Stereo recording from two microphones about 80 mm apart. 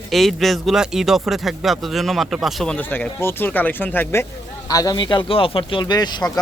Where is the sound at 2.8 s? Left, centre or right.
Left.